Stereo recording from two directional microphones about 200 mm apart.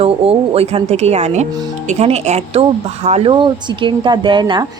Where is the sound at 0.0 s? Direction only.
30° right (ahead or behind).